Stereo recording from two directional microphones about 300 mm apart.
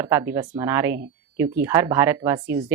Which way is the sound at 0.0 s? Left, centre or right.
Centre.